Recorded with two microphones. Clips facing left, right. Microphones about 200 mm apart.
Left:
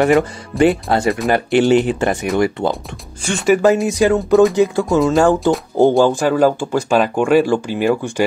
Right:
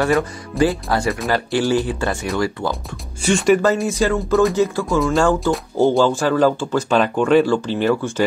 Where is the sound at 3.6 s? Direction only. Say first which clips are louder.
Left 4 dB; 15° left (ahead or behind).